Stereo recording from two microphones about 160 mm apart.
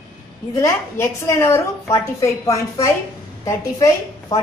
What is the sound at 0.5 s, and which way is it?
A woman's voice, 15° left (ahead or behind).